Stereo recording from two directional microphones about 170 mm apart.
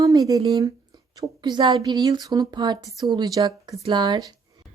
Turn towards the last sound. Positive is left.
turn(degrees=-25)  # may be behind; listen again after turning